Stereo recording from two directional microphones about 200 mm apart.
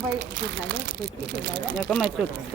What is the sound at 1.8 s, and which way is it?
Speech, centre (ahead or behind).